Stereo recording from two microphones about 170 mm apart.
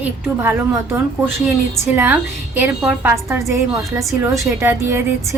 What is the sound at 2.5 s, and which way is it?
A woman's voice, 10° right (ahead or behind).